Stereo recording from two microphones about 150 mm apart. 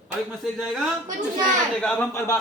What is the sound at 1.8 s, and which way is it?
Speech, 5° left (ahead or behind).